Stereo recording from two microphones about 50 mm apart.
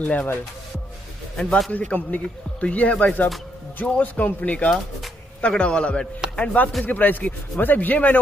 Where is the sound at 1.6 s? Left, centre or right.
Left.